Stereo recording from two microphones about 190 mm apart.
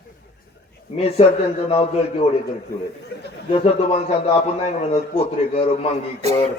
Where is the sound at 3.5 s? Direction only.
30° left (ahead or behind).